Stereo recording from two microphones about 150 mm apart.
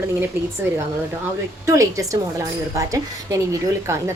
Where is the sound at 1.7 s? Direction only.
20° right (ahead or behind).